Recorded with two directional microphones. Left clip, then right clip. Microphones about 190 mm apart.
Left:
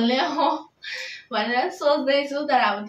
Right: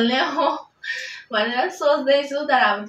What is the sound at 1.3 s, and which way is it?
A man's voice, 25° left (ahead or behind).